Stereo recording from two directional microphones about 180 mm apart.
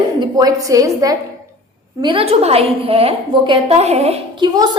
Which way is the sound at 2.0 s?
30° right (ahead or behind).